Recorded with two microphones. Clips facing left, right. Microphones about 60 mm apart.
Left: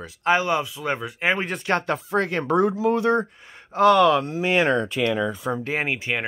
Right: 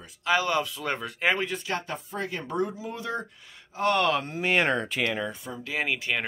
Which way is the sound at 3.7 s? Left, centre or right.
Left.